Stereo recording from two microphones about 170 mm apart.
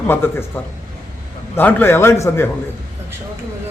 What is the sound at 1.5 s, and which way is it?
Speech, 10° left (ahead or behind).